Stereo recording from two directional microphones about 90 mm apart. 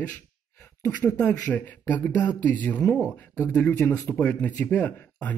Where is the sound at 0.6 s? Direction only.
30° left (ahead or behind).